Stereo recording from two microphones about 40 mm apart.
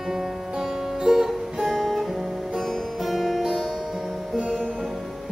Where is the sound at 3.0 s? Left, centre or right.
Centre.